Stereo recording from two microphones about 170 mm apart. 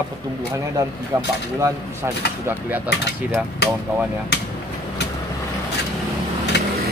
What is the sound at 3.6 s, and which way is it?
Speech, 80° left.